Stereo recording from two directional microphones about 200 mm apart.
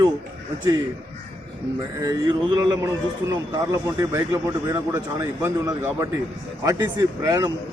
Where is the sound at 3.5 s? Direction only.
15° right (ahead or behind).